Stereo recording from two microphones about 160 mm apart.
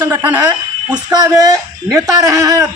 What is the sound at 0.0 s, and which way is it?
Speech, 15° right (ahead or behind).